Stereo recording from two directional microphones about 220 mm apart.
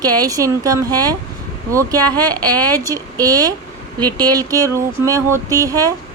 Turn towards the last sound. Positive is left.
turn(degrees=-15)  # may be behind; listen again after turning